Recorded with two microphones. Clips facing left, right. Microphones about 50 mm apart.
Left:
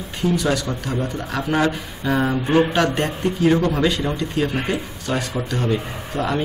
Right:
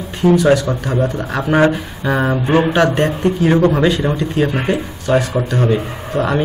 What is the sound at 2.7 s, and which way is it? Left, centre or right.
Speech, centre.